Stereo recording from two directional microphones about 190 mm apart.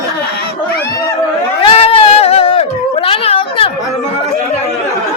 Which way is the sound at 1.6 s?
30° left (ahead or behind).